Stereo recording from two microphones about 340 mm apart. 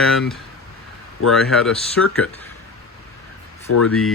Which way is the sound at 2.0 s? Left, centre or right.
Left.